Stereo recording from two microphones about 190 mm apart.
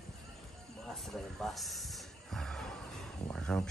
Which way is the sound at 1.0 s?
Centre (ahead or behind).